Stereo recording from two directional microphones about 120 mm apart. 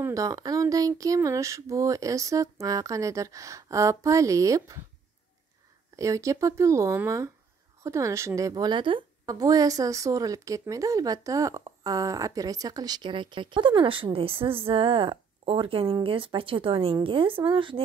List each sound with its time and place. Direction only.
0.0 s speech: 30° right (ahead or behind)
5.9 s a woman's voice: 25° right (ahead or behind); by 17.8 s 45° right (ahead or behind)